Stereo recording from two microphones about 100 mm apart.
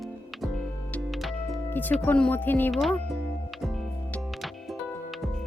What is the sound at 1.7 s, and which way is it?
Speech, 20° left (ahead or behind).